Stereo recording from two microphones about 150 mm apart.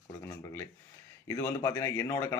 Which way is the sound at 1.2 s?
20° left (ahead or behind).